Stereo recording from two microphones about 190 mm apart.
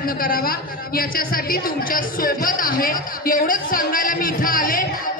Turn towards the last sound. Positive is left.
turn(degrees=45)  # may be behind; listen again after turning